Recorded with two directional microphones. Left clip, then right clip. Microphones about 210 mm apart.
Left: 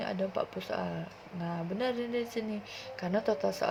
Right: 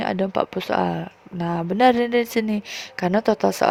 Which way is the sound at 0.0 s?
50° right (ahead or behind).